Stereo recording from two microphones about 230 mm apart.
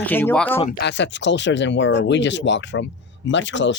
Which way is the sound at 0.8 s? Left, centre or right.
Left.